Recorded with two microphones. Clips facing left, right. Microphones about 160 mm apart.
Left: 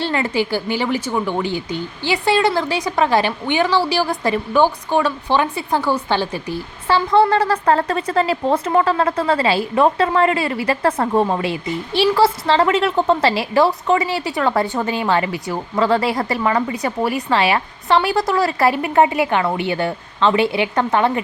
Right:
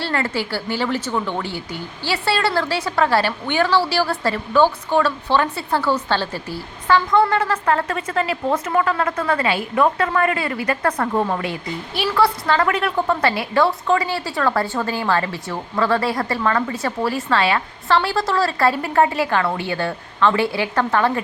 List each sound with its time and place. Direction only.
0.0 s a woman's voice: 15° left (ahead or behind)
6.8 s a woman's voice: 30° left (ahead or behind)